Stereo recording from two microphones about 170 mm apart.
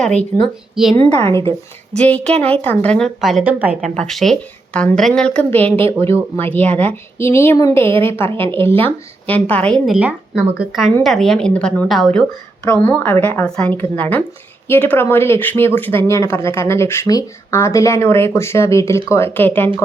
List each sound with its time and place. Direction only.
0.4 s speech: centre (ahead or behind)
0.9 s speech: 15° left (ahead or behind); by 3.8 s 10° right (ahead or behind)
3.9 s speech: centre (ahead or behind)
12.6 s speech: 10° left (ahead or behind)